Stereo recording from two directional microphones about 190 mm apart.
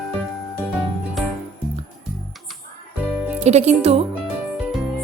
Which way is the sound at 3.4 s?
35° right (ahead or behind).